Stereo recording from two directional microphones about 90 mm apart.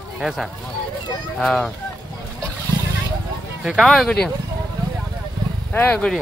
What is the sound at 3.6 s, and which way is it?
Speech, centre (ahead or behind).